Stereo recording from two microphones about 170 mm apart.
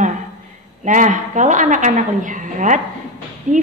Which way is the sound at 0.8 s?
50° right (ahead or behind).